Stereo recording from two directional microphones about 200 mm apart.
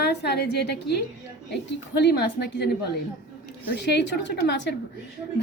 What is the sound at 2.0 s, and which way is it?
Speech, 55° left (ahead or behind).